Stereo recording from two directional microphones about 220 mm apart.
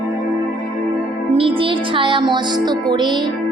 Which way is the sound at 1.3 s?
25° right (ahead or behind).